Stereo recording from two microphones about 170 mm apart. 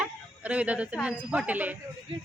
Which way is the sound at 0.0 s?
5° right (ahead or behind).